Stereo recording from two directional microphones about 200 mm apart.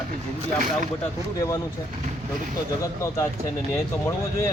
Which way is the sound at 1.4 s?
15° left (ahead or behind).